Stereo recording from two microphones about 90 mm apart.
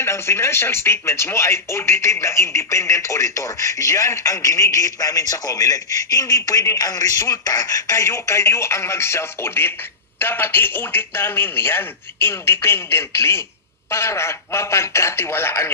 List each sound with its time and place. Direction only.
0.0 s speech: 30° left (ahead or behind)